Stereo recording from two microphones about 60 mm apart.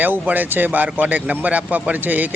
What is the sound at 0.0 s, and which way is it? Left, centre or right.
Speech, right.